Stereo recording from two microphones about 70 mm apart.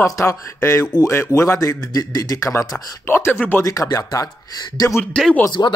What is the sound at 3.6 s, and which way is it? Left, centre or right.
Speech, left.